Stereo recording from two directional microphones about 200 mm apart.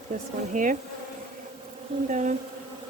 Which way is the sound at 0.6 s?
40° right (ahead or behind).